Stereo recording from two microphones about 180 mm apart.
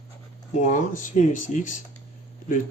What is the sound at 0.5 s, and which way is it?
Speech, 45° left (ahead or behind).